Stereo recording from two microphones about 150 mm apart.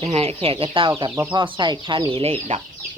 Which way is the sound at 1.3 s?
30° right (ahead or behind).